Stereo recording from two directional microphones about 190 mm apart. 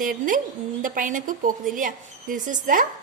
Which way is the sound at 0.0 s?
45° right (ahead or behind).